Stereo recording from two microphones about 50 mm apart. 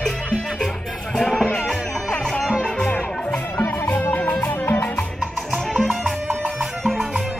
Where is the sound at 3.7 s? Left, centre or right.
Left.